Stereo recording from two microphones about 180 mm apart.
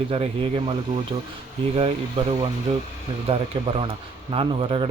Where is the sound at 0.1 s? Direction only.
30° right (ahead or behind).